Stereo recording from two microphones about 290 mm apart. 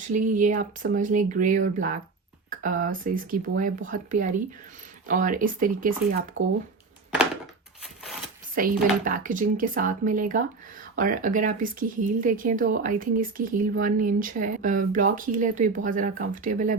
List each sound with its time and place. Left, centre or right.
0.1 s speech: right
8.5 s speech: right